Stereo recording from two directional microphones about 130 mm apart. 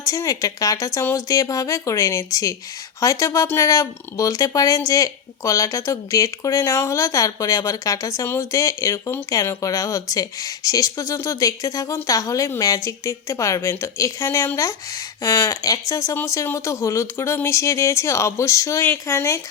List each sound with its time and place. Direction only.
0.0 s speech: 25° left (ahead or behind)